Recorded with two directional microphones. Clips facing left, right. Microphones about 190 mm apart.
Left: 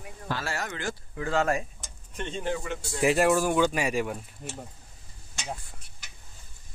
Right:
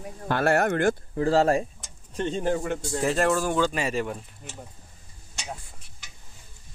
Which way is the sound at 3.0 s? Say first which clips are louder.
Left 2 dB; 10° left (ahead or behind).